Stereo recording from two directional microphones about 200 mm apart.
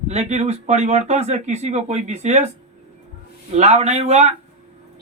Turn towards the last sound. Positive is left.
turn(degrees=-35)  # may be behind; listen again after turning